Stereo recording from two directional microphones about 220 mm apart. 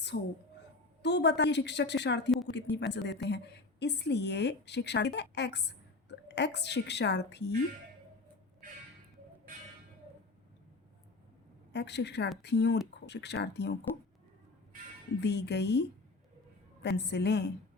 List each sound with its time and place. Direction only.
0.1 s a woman's voice: 50° left (ahead or behind)
11.7 s a woman's voice: 50° left (ahead or behind)
15.2 s a woman's voice: 50° left (ahead or behind)